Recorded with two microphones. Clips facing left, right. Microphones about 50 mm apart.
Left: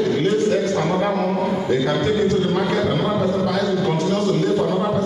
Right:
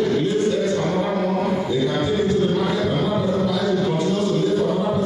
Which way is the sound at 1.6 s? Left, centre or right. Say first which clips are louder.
Left 2 dB; left.